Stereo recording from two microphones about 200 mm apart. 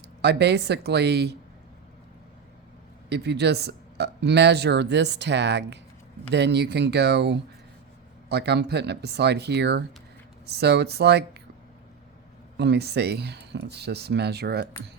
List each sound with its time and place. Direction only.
0.2 s speech: 55° right (ahead or behind)
3.1 s speech: 55° right (ahead or behind)
12.5 s speech: 55° right (ahead or behind)